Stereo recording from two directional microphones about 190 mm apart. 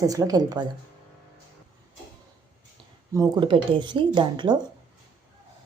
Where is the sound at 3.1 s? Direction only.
20° right (ahead or behind).